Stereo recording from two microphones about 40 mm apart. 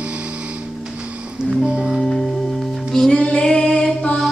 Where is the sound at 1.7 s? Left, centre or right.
Right.